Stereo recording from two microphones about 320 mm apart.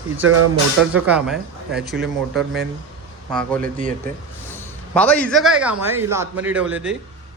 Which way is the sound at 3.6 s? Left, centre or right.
Right.